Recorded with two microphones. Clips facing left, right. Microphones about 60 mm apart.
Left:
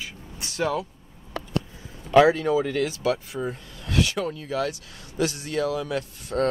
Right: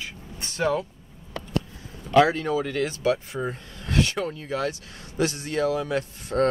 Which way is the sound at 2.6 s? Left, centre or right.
Centre.